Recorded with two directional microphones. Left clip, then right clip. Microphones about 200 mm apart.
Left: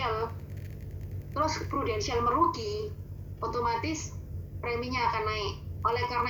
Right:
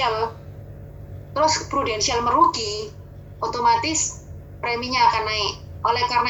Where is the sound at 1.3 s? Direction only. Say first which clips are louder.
Right 10 dB; 30° right (ahead or behind).